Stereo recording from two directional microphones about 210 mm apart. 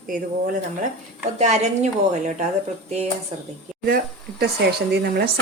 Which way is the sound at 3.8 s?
45° right (ahead or behind).